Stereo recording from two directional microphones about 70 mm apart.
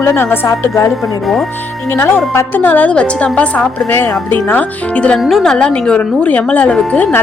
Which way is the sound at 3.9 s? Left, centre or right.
Left.